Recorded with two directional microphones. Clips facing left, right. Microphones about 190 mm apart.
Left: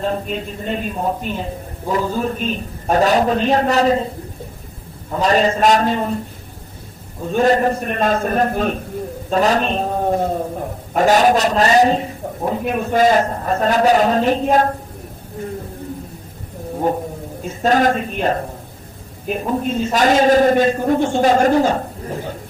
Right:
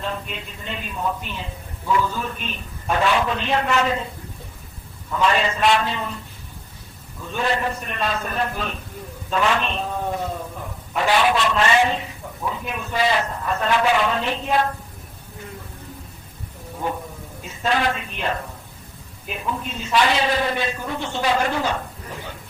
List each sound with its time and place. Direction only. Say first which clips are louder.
0.0 s a man's voice: left 8 dB; 40° left (ahead or behind)
5.1 s a man's voice: left 5 dB; 40° left (ahead or behind)
16.7 s a sound: left 8 dB; 40° left (ahead or behind)
17.4 s a man's voice: left 7 dB; 45° left (ahead or behind)